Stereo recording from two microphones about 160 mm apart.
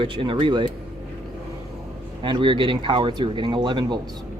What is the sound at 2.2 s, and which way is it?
Speech, 30° right (ahead or behind).